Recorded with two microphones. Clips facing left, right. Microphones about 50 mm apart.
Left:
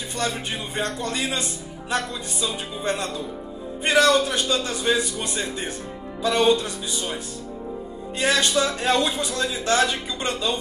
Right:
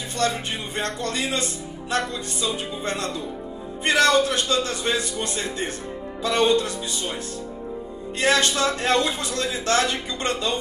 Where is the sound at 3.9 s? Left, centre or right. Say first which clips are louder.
Left 1 dB; centre.